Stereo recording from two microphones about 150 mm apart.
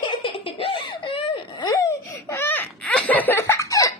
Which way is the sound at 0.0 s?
35° left (ahead or behind).